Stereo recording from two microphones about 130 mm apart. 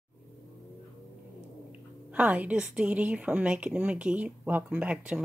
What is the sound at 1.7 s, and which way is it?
A woman's voice, 10° right (ahead or behind).